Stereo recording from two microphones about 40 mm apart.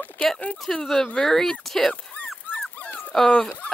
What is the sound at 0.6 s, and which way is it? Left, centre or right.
Speech, centre.